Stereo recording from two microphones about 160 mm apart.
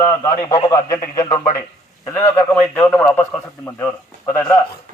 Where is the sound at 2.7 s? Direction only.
5° left (ahead or behind).